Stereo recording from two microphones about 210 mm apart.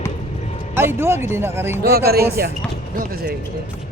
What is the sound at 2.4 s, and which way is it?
Speech, 45° right (ahead or behind).